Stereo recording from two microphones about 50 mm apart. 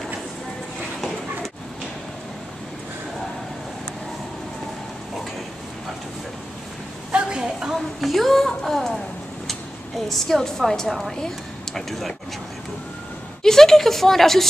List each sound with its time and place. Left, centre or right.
7.1 s a woman's voice: centre
10.0 s a woman's voice: centre
13.4 s speech: centre